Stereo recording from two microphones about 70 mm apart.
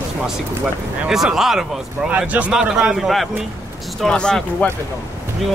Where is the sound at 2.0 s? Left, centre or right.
Right.